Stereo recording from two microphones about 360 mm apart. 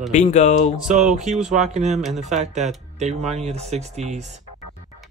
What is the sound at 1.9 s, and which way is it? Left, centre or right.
Speech, centre.